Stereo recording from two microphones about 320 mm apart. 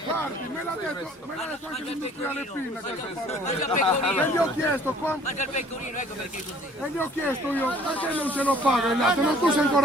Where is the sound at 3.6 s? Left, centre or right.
Centre.